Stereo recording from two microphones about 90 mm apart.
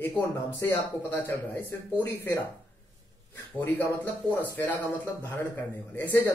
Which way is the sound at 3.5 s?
20° left (ahead or behind).